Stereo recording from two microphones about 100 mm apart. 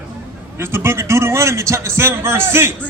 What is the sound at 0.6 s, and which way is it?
A man's voice, 25° right (ahead or behind).